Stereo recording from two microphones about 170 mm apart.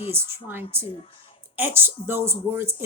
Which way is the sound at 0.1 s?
15° right (ahead or behind).